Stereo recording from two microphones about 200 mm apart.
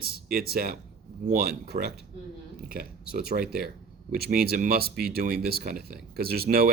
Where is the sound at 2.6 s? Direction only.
50° right (ahead or behind).